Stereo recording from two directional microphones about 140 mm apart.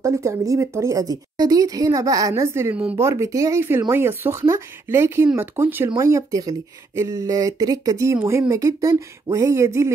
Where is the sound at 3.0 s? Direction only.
20° right (ahead or behind).